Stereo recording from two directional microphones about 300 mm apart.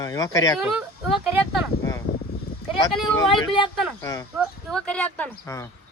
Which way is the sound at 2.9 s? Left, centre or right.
Centre.